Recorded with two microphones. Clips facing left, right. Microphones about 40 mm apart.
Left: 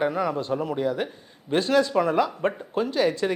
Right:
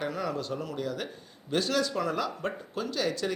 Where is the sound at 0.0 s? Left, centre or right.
Left.